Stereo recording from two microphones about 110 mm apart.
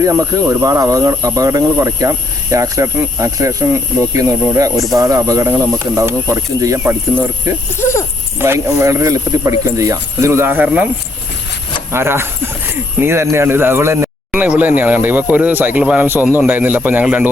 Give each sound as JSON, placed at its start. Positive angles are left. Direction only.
{"t": 0.0, "sound": "speech", "side_deg": -30}
{"t": 7.8, "sound": "speech", "side_deg": 25}
{"t": 8.4, "sound": "speech", "side_deg": -25}
{"t": 11.9, "sound": "speech", "side_deg": -20}
{"t": 14.3, "sound": "speech", "side_deg": -10}